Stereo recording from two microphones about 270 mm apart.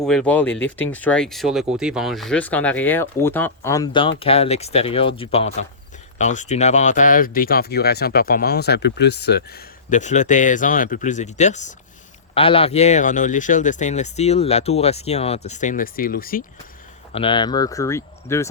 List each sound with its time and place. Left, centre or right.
0.0 s speech: centre; by 16.4 s left
17.2 s speech: centre